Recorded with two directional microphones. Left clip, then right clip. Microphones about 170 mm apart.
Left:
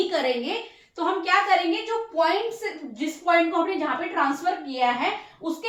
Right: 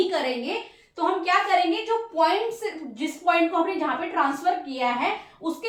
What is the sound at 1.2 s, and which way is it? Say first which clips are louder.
A woman's voice: left 1 dB; 20° right (ahead or behind).